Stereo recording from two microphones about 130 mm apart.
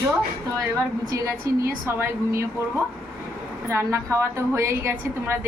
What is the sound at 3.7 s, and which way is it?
A woman's voice, 20° right (ahead or behind).